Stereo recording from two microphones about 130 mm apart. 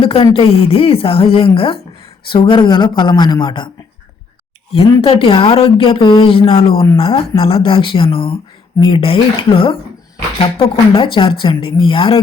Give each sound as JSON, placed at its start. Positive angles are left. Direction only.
{"t": 0.0, "sound": "speech", "side_deg": 45}
{"t": 4.7, "sound": "speech", "side_deg": 50}